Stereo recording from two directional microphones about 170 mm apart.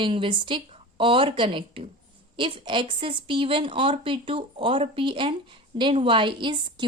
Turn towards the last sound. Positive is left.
turn(degrees=-30)  # may be behind; listen again after turning